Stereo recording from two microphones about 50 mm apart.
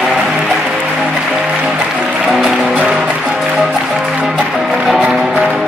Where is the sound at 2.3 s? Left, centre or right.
Centre.